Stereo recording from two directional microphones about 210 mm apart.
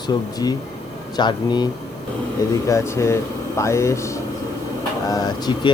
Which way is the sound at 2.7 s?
15° left (ahead or behind).